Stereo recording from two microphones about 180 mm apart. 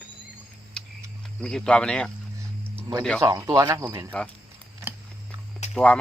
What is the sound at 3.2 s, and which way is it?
Speech, 20° right (ahead or behind).